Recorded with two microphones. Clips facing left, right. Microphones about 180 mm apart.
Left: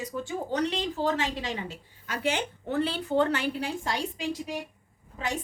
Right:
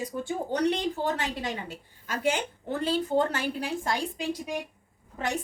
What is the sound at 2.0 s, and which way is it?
A woman's voice, 45° right (ahead or behind).